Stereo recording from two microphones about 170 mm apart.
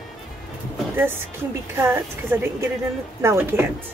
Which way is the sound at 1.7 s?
15° right (ahead or behind).